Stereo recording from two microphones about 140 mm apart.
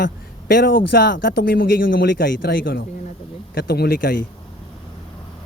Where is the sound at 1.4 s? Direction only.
90° left.